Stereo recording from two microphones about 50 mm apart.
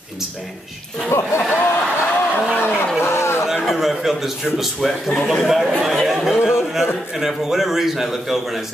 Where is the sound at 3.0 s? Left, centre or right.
Left.